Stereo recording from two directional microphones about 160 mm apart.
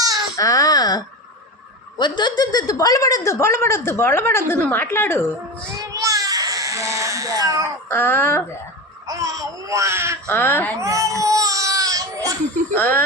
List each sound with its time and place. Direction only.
0.3 s a woman's voice: 20° left (ahead or behind)
5.8 s baby cry: 20° right (ahead or behind)
7.9 s a woman's voice: 10° left (ahead or behind)
9.0 s speech: 20° right (ahead or behind)
10.2 s a woman's voice: 15° left (ahead or behind)
10.8 s baby cry: 20° right (ahead or behind)
12.7 s a woman's voice: 10° left (ahead or behind)